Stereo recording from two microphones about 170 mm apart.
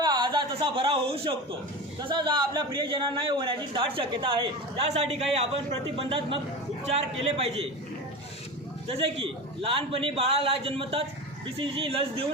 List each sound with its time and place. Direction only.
0.0 s a man's voice: 25° right (ahead or behind)
8.9 s a man's voice: 35° right (ahead or behind)